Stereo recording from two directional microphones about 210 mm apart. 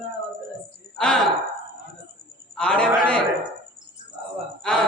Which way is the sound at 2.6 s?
5° left (ahead or behind).